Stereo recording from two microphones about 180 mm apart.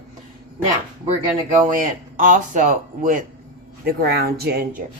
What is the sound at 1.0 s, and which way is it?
Speech, 40° right (ahead or behind).